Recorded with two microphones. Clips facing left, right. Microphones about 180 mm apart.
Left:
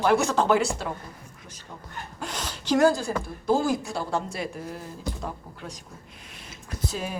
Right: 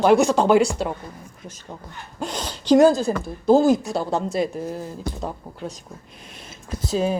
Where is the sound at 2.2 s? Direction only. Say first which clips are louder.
Right 8 dB; 25° right (ahead or behind).